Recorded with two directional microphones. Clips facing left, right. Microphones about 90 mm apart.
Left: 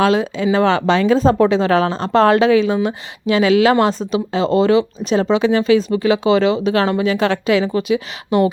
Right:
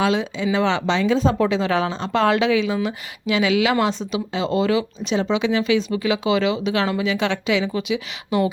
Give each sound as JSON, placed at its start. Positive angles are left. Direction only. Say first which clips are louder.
{"t": 0.0, "sound": "speech", "louder": "left 5 dB", "side_deg": 45}